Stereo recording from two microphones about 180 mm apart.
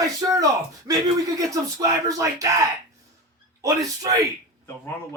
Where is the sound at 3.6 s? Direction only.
20° right (ahead or behind).